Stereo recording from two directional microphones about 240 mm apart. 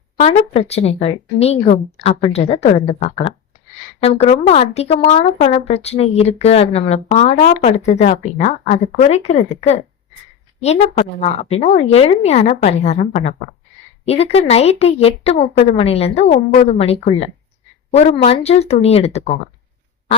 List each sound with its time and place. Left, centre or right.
0.2 s speech: left